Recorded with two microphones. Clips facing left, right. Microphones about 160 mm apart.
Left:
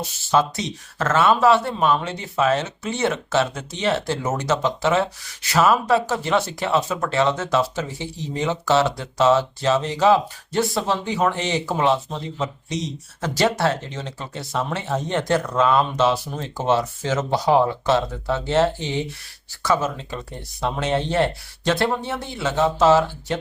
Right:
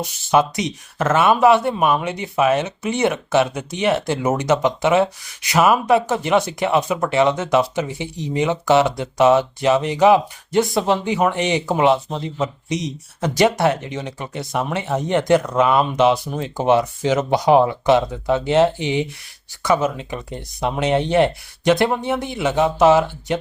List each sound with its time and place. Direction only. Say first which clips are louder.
0.0 s speech: right 3 dB; 15° right (ahead or behind)